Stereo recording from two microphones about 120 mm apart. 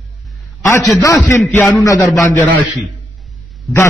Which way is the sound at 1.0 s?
25° left (ahead or behind).